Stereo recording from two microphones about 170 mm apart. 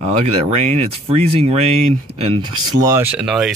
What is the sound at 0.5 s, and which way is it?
Speech, 40° right (ahead or behind).